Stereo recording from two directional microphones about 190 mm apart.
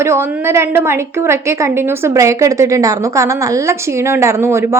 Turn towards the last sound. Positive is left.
turn(degrees=-15)  # may be behind; listen again after turning